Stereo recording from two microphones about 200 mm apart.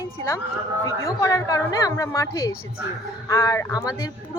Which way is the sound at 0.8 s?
15° left (ahead or behind).